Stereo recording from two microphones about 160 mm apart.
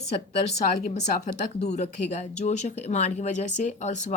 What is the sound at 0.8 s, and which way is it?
Speech, 45° left (ahead or behind).